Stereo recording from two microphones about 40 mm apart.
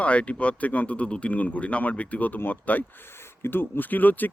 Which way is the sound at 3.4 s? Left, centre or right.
Left.